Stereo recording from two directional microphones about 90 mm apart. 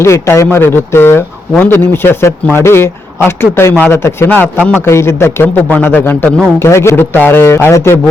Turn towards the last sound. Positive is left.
turn(degrees=30)  # may be behind; listen again after turning